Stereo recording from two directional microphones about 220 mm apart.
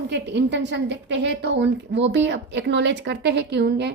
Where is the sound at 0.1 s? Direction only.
50° right (ahead or behind).